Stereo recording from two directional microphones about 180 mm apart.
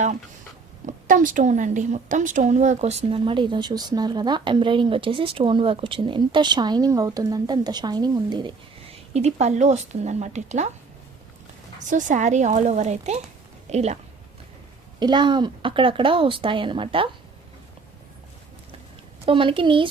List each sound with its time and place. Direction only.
0.9 s a woman's voice: 45° right (ahead or behind); by 8.5 s 25° right (ahead or behind)
9.1 s speech: 40° right (ahead or behind)
11.9 s speech: 45° right (ahead or behind)
14.9 s a woman's voice: 25° right (ahead or behind)
19.2 s a woman's voice: 30° right (ahead or behind)